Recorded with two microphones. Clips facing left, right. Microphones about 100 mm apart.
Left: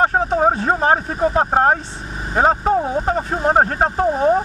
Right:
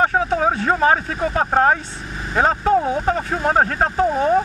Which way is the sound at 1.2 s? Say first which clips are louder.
Left 2 dB; 15° left (ahead or behind).